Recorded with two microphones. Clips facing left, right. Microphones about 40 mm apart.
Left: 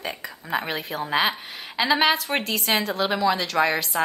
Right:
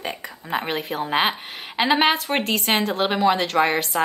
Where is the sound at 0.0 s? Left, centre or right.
Right.